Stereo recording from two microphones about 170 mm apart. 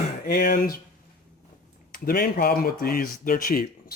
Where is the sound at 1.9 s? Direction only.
65° left (ahead or behind).